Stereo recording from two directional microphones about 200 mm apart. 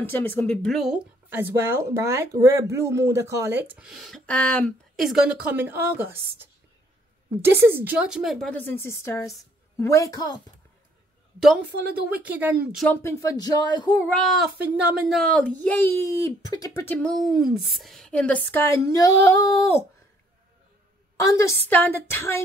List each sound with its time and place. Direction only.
0.0 s a child's voice: 10° left (ahead or behind)
11.3 s speech: 5° right (ahead or behind)
12.8 s a child's voice: 10° left (ahead or behind)
14.1 s a child's voice: centre (ahead or behind)
21.2 s a child's voice: 15° left (ahead or behind)